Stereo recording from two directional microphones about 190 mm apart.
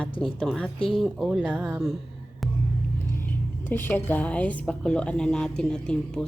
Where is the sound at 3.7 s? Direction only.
10° left (ahead or behind).